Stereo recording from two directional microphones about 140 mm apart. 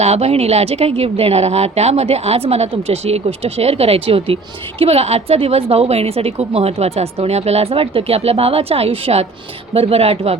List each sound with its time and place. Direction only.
0.0 s a woman's voice: 50° right (ahead or behind)